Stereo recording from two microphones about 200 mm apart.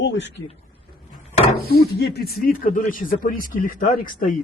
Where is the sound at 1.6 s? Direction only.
50° left (ahead or behind).